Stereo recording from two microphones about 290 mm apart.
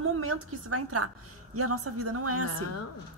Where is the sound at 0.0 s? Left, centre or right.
Right.